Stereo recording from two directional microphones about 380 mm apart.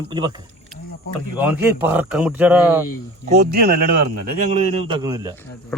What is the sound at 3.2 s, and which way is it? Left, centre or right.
A man's voice, right.